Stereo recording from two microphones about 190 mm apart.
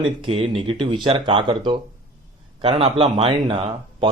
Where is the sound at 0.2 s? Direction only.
30° right (ahead or behind).